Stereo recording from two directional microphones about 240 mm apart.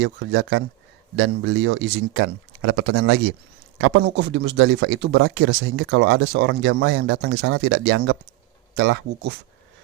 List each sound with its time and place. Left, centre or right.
0.0 s speech: right